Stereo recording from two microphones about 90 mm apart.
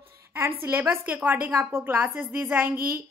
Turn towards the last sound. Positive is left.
turn(degrees=-25)  # may be behind; listen again after turning